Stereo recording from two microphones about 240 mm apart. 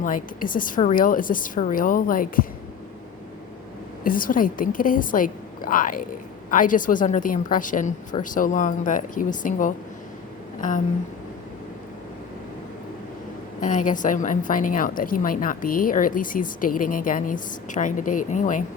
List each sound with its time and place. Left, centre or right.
0.0 s a woman's voice: left
4.0 s a woman's voice: left
13.6 s a woman's voice: left